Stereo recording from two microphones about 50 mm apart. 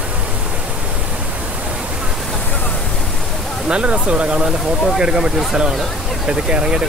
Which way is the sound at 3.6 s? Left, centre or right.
Right.